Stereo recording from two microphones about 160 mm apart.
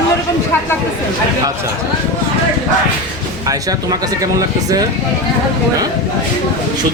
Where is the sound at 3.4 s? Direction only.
20° right (ahead or behind).